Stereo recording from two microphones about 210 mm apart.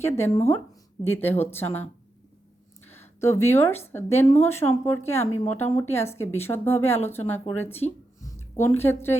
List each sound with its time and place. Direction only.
0.0 s a woman's voice: 10° left (ahead or behind)
7.7 s music: 30° left (ahead or behind)
8.4 s a woman's voice: 10° left (ahead or behind)